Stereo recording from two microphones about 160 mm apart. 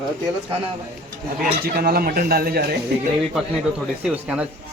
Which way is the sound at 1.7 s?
70° right (ahead or behind).